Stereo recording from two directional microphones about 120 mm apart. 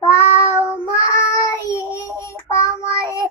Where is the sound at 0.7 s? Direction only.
20° left (ahead or behind).